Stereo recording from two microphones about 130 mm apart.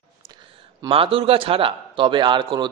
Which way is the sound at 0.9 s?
45° right (ahead or behind).